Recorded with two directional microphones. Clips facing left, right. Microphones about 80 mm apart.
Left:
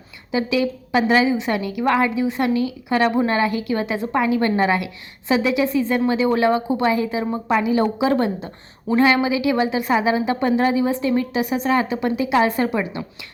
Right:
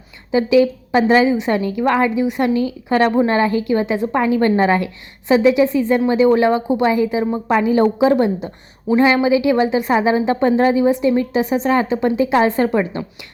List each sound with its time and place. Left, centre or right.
0.3 s a woman's voice: right
8.1 s a woman's voice: centre